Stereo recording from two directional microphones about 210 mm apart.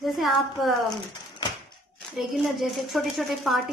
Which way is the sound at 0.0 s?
Centre (ahead or behind).